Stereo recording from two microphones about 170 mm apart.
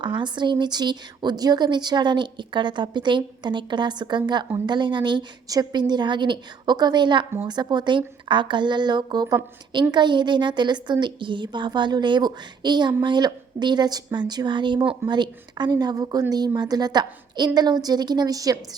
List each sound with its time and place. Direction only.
0.2 s speech: 25° right (ahead or behind)